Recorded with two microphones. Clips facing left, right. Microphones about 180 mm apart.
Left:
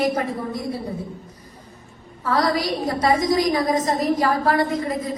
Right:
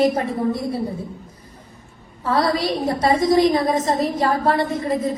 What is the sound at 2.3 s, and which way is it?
A woman's voice, 25° right (ahead or behind).